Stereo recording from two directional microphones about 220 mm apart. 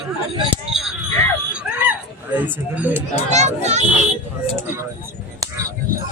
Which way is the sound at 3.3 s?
30° right (ahead or behind).